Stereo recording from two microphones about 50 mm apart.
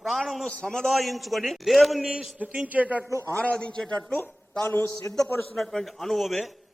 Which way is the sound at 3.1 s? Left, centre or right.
Right.